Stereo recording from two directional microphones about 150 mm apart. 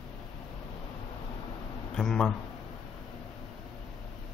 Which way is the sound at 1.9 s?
5° left (ahead or behind).